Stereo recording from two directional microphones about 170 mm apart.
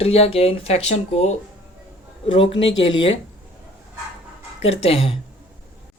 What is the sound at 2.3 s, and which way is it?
Speech, 30° left (ahead or behind).